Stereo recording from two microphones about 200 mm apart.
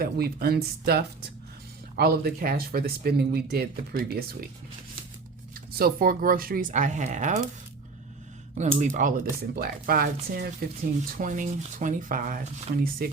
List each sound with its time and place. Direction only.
0.0 s speech: 50° right (ahead or behind)
5.5 s speech: 45° right (ahead or behind)
8.8 s speech: 40° right (ahead or behind)